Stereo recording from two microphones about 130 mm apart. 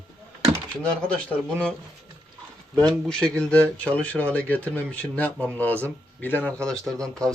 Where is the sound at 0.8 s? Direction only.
10° left (ahead or behind).